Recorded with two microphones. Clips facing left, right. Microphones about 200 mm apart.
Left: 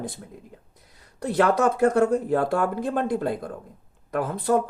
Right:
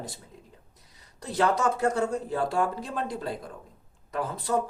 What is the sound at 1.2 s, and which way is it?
Speech, 55° left (ahead or behind).